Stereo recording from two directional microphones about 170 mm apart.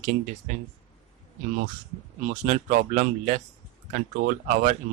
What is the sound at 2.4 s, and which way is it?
Speech, 45° right (ahead or behind).